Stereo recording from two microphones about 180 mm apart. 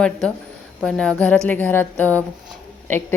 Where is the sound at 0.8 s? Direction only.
5° left (ahead or behind).